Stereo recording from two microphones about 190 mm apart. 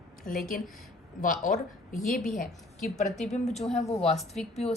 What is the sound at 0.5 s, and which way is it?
Speech, 45° left (ahead or behind).